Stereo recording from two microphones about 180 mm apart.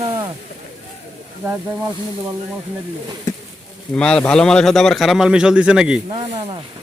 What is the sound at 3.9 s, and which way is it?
A man's voice, 5° left (ahead or behind).